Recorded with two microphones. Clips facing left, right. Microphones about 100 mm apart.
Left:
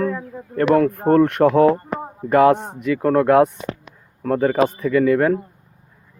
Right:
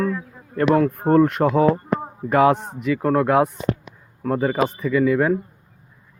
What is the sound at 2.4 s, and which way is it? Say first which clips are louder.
Speech: left 2 dB; 50° left (ahead or behind).